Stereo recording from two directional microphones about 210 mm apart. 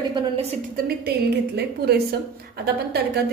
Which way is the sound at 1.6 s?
50° right (ahead or behind).